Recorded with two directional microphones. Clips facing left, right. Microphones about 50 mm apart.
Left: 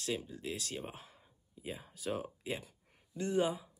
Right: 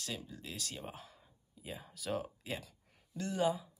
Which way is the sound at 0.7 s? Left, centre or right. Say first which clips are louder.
Left 2 dB; left.